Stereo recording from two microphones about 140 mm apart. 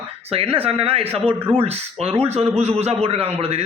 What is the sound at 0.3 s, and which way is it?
A man's voice, 45° right (ahead or behind).